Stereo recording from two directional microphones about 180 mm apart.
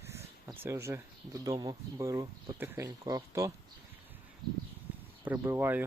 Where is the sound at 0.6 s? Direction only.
15° right (ahead or behind).